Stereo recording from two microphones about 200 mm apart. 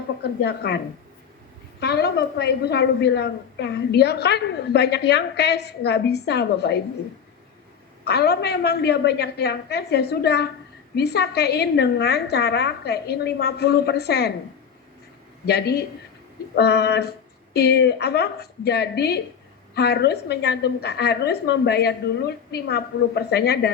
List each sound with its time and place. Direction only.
0.2 s a woman's voice: 55° left (ahead or behind)
1.8 s a woman's voice: 55° left (ahead or behind)
8.0 s a woman's voice: 55° left (ahead or behind)
15.4 s a woman's voice: 55° left (ahead or behind)